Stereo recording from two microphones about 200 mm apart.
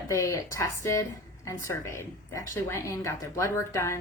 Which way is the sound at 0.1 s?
15° left (ahead or behind).